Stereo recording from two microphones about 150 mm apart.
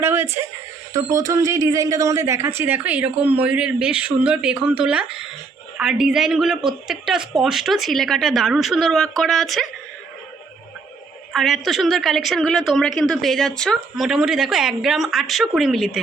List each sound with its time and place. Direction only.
0.0 s a sound: 15° right (ahead or behind)
0.9 s a woman's voice: 20° right (ahead or behind); by 9.6 s centre (ahead or behind)
11.3 s a woman's voice: centre (ahead or behind)